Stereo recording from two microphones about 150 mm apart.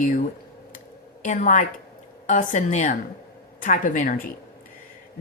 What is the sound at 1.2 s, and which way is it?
A woman's voice, 55° left (ahead or behind).